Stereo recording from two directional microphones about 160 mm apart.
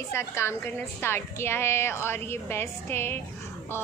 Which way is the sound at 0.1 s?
15° left (ahead or behind).